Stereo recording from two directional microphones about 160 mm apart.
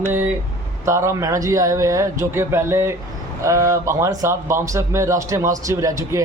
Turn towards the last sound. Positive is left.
turn(degrees=-20)  # may be behind; listen again after turning